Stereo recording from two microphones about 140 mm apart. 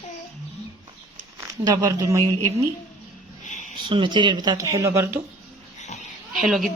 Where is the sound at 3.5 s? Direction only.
60° left (ahead or behind).